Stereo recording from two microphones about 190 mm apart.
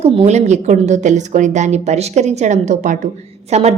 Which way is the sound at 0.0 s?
35° right (ahead or behind).